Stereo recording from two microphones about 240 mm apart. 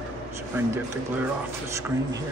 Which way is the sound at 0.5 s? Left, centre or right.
Centre.